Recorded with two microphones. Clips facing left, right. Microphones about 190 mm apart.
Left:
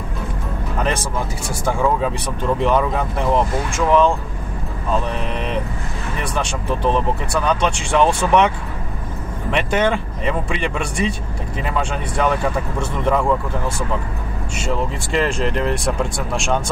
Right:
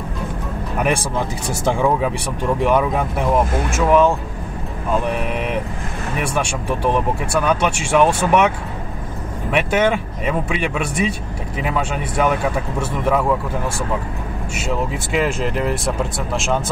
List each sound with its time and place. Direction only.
0.7 s music: 10° right (ahead or behind)
1.5 s speech: 25° right (ahead or behind)
2.0 s speech: 15° right (ahead or behind)
9.5 s speech: 5° right (ahead or behind)
14.5 s speech: 5° right (ahead or behind)